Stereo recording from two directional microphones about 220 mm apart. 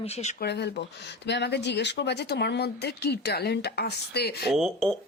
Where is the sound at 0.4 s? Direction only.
50° left (ahead or behind).